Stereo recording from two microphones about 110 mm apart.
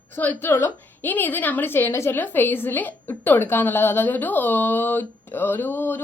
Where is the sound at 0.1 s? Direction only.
20° left (ahead or behind).